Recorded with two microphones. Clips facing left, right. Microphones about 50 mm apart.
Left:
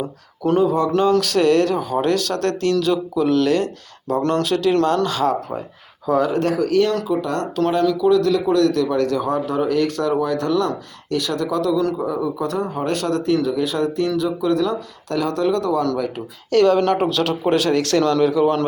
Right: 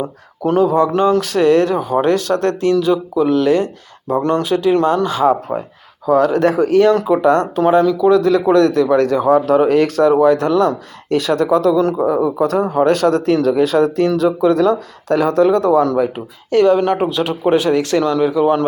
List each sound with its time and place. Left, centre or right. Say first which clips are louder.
0.0 s speech: right 3 dB; right
6.1 s speech: right 5 dB; centre
6.4 s speech: right 6 dB; right
9.6 s speech: right 6 dB; right
10.0 s speech: right 8 dB; right
12.7 s speech: right 8 dB; right
13.4 s speech: right 7 dB; right
14.3 s speech: right 6 dB; right; by 18.6 s centre